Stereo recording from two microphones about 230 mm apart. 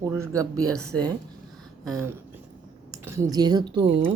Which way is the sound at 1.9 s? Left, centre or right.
Centre.